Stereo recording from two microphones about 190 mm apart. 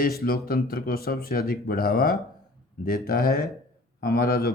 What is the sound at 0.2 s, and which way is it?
Speech, 50° left (ahead or behind).